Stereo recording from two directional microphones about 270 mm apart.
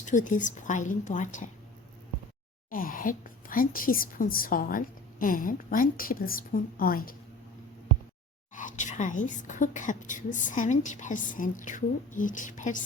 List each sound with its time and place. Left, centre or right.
0.0 s a woman's voice: left
2.6 s a woman's voice: left
8.5 s a woman's voice: left